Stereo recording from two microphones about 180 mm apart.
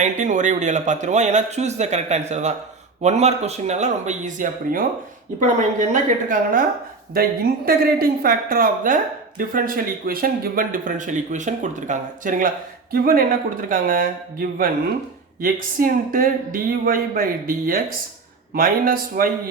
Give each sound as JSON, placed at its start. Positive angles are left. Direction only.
{"t": 0.0, "sound": "a man's voice", "side_deg": -45}